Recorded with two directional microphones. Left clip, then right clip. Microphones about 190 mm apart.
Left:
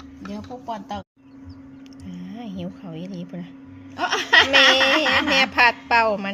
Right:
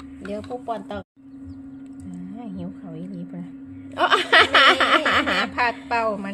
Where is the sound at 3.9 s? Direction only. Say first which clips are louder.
Right 1 dB; 40° right (ahead or behind).